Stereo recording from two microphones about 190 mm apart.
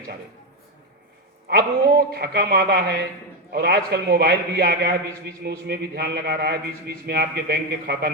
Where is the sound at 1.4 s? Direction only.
50° right (ahead or behind).